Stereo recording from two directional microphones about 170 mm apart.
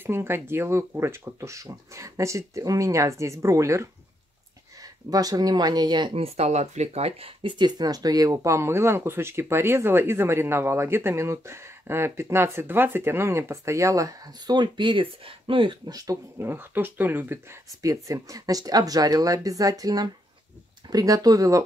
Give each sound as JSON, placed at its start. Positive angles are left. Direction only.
{"t": 0.0, "sound": "speech", "side_deg": -15}